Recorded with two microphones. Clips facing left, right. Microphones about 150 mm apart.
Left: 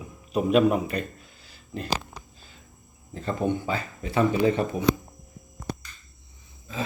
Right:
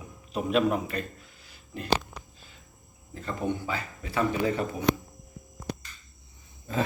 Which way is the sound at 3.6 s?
25° left (ahead or behind).